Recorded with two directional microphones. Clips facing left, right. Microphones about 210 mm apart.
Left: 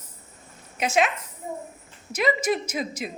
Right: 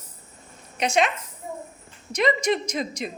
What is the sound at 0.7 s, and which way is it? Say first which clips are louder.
Speech: right 1 dB; 5° left (ahead or behind).